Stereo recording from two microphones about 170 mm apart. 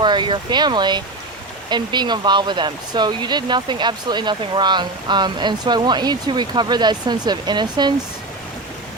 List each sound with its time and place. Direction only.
0.0 s speech: 25° right (ahead or behind)